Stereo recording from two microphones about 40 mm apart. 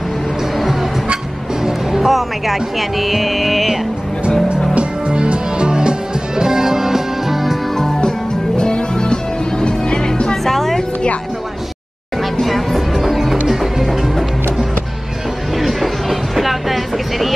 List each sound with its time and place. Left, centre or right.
1.6 s speech: centre
4.7 s music: right; by 7.5 s centre
7.7 s music: centre
10.3 s music: centre
12.2 s music: centre
15.5 s vehicle: centre